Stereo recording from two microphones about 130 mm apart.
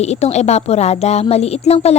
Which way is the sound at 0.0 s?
55° left (ahead or behind).